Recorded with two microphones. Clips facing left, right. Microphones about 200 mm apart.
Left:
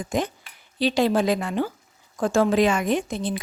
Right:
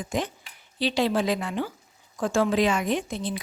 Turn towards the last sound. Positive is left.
turn(degrees=50)  # may be behind; listen again after turning